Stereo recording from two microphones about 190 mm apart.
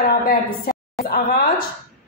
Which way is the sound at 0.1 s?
50° left (ahead or behind).